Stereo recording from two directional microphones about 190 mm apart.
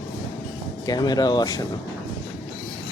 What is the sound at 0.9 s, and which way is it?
Speech, 20° left (ahead or behind).